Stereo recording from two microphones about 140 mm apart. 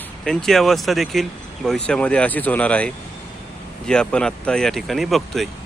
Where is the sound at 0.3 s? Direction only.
Centre (ahead or behind).